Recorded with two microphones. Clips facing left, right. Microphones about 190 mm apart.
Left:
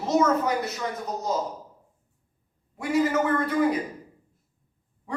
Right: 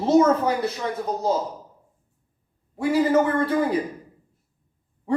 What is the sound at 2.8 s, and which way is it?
A man's voice, 30° right (ahead or behind).